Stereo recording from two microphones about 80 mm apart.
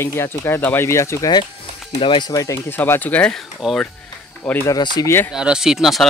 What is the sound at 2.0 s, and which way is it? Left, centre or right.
Speech, left.